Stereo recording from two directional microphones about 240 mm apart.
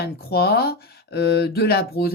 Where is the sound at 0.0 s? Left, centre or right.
Left.